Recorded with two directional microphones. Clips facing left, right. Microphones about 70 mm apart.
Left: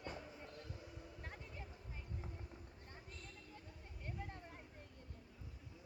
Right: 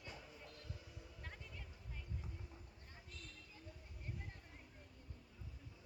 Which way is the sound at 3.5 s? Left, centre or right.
Left.